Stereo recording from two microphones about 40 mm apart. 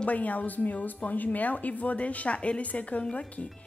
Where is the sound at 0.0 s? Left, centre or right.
Left.